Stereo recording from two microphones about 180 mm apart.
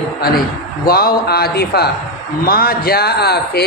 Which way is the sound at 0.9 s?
60° left (ahead or behind).